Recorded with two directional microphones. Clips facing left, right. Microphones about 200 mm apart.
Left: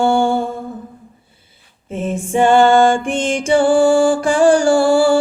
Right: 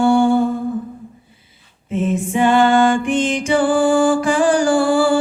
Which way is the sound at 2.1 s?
30° left (ahead or behind).